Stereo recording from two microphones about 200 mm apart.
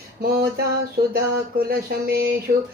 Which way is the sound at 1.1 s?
50° right (ahead or behind).